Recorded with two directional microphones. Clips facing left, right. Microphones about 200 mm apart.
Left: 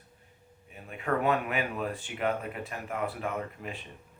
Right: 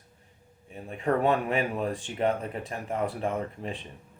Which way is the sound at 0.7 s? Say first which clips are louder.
Right 4 dB; 30° right (ahead or behind).